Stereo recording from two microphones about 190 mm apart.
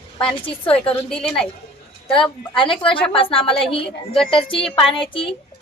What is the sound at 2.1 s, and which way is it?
Speech, 25° left (ahead or behind).